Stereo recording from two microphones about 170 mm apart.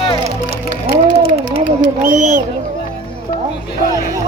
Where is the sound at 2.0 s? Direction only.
45° right (ahead or behind).